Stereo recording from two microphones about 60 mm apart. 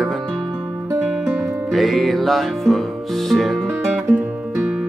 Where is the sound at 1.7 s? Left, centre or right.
Centre.